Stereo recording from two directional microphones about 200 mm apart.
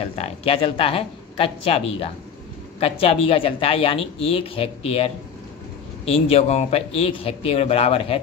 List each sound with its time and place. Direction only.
0.0 s speech: 30° left (ahead or behind)